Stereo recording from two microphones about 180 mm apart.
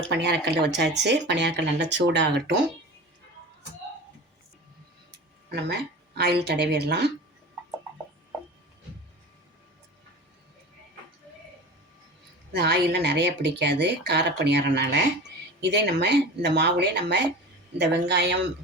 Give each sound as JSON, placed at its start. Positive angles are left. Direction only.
{"t": 0.1, "sound": "speech", "side_deg": -70}
{"t": 5.1, "sound": "speech", "side_deg": -70}
{"t": 12.5, "sound": "speech", "side_deg": -65}